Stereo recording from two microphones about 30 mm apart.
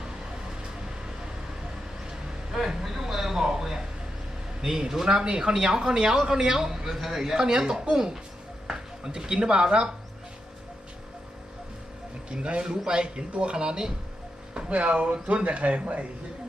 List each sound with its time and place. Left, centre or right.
2.5 s a man's voice: centre
7.0 s a man's voice: centre
7.3 s a man's voice: centre
12.3 s a man's voice: right
13.1 s a man's voice: right
14.7 s speech: right